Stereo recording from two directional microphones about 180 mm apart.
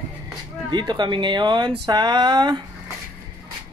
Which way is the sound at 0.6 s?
25° right (ahead or behind).